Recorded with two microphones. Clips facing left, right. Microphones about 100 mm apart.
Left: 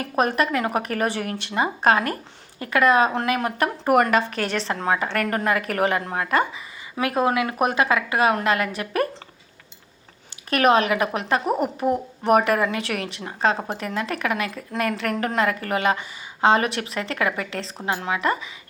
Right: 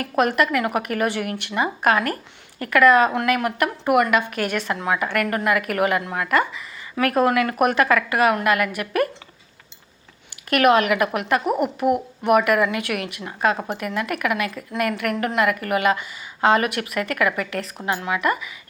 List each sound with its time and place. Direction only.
0.0 s a woman's voice: 25° left (ahead or behind)
6.9 s a woman's voice: 20° left (ahead or behind)
10.5 s a woman's voice: 25° left (ahead or behind)